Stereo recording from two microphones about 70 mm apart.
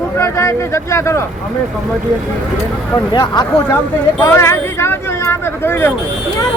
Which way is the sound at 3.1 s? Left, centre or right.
Left.